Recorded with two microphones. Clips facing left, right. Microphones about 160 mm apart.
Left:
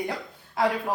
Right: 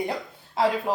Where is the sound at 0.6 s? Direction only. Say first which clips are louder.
Right 1 dB; 30° right (ahead or behind).